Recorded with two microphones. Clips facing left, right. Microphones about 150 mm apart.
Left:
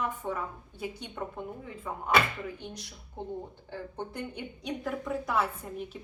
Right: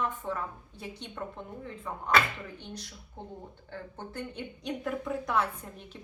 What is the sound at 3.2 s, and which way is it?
A woman's voice, 15° left (ahead or behind).